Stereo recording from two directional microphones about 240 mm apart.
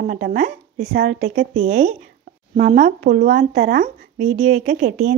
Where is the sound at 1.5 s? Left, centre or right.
Right.